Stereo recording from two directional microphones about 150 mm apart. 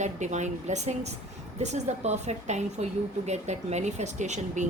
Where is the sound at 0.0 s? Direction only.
50° right (ahead or behind).